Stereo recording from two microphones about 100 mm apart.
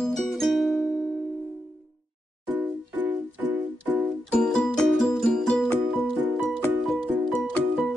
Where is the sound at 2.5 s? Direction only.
15° right (ahead or behind).